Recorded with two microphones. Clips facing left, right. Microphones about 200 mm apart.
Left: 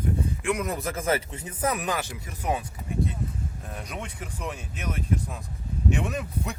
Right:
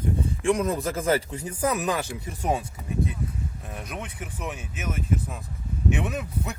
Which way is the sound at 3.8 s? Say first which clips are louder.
Right 1 dB; 5° right (ahead or behind).